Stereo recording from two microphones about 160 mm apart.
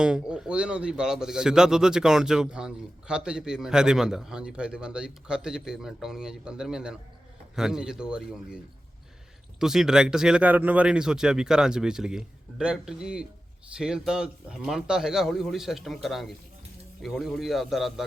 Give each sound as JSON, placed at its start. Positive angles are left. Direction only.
{"t": 0.0, "sound": "speech", "side_deg": -5}
{"t": 9.6, "sound": "speech", "side_deg": -5}